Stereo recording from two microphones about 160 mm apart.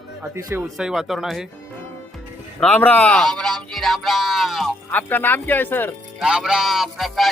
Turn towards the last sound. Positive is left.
turn(degrees=0)  # may be behind; listen again after turning